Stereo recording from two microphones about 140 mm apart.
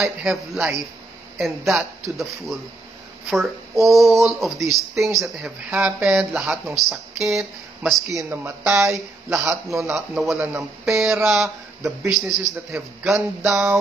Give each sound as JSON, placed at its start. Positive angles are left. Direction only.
{"t": 0.0, "sound": "speech", "side_deg": 0}
{"t": 8.3, "sound": "speech", "side_deg": -20}
{"t": 8.9, "sound": "speech", "side_deg": -5}
{"t": 9.5, "sound": "speech", "side_deg": -20}
{"t": 9.8, "sound": "speech", "side_deg": 0}
{"t": 11.4, "sound": "speech", "side_deg": -20}
{"t": 12.1, "sound": "speech", "side_deg": 0}